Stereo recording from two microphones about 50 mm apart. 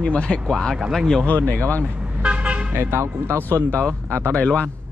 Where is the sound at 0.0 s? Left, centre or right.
Left.